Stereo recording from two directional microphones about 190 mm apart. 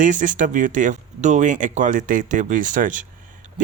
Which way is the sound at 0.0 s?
40° right (ahead or behind).